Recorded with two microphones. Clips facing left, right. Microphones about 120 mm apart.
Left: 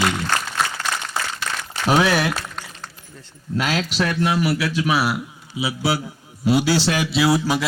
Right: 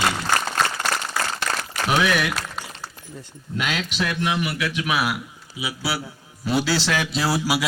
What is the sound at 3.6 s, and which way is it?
A man's voice, 35° left (ahead or behind).